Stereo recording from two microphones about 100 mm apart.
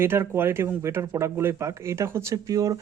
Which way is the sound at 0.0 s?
25° right (ahead or behind).